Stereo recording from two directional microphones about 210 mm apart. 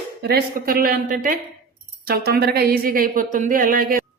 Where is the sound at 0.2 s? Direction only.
50° right (ahead or behind).